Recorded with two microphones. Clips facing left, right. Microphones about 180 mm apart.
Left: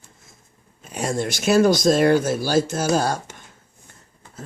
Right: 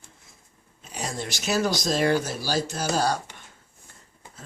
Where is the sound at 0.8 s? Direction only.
55° left (ahead or behind).